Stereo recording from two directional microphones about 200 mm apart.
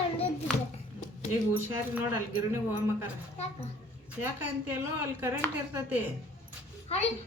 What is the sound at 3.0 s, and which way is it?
Speech, 35° left (ahead or behind).